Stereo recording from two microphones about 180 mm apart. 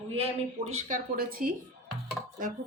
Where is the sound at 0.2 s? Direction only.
35° right (ahead or behind).